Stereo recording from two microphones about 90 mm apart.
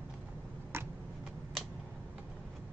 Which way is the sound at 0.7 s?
25° right (ahead or behind).